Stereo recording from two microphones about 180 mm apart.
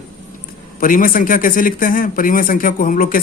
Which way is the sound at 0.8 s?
50° left (ahead or behind).